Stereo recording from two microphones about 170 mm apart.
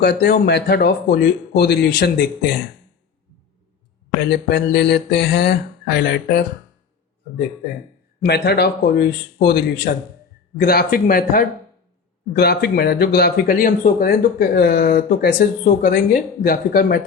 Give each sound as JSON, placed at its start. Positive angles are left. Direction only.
{"t": 0.0, "sound": "speech", "side_deg": 70}
{"t": 4.3, "sound": "speech", "side_deg": 80}
{"t": 8.2, "sound": "speech", "side_deg": 70}